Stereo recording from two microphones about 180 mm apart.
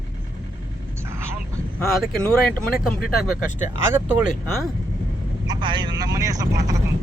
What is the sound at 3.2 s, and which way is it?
Speech, 5° right (ahead or behind).